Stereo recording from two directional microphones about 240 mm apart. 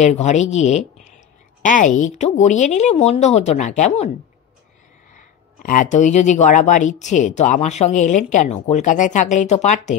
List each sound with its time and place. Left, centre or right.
0.0 s speech: left
5.1 s speech: left